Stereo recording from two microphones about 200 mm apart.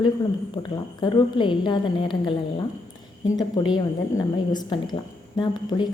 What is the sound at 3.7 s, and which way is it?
A woman's voice, 20° left (ahead or behind).